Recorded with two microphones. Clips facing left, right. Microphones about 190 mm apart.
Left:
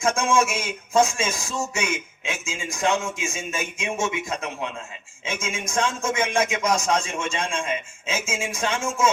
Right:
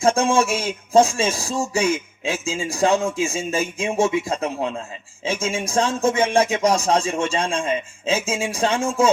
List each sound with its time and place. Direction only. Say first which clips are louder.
0.0 s speech: right 4 dB; 35° right (ahead or behind)